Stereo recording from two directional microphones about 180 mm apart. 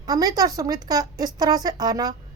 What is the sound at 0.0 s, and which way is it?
A woman's voice, 20° right (ahead or behind).